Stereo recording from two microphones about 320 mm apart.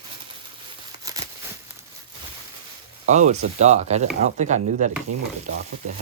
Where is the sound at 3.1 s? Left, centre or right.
Right.